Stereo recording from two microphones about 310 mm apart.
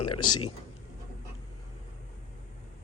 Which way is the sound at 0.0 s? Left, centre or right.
Left.